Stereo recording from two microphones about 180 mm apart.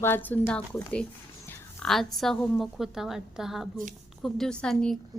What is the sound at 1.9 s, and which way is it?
A woman's voice, centre (ahead or behind).